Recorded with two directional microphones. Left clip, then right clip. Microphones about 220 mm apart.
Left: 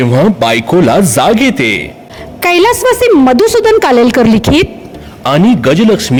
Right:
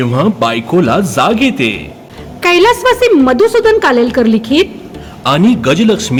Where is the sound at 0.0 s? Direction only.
30° left (ahead or behind).